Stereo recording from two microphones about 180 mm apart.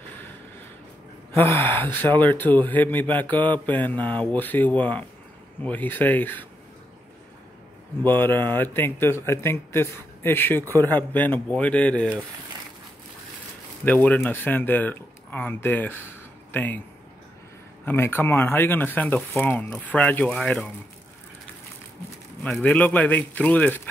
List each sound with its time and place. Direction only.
1.3 s speech: 15° left (ahead or behind)
8.0 s speech: 10° left (ahead or behind)
14.0 s speech: 10° left (ahead or behind)
17.8 s speech: 10° left (ahead or behind)
22.4 s speech: 5° left (ahead or behind)